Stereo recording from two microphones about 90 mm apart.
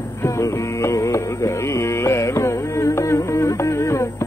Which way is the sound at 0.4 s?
35° left (ahead or behind).